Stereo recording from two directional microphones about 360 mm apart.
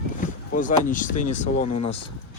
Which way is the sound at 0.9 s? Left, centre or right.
Left.